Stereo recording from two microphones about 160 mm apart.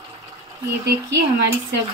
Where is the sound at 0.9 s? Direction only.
90° right.